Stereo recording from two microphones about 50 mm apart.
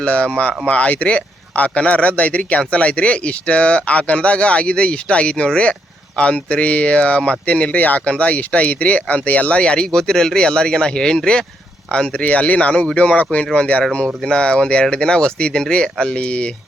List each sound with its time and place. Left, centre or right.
0.0 s speech: left